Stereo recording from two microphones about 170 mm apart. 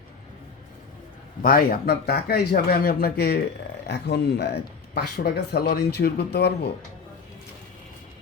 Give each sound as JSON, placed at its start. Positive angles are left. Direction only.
{"t": 1.4, "sound": "speech", "side_deg": 60}
{"t": 3.8, "sound": "speech", "side_deg": 75}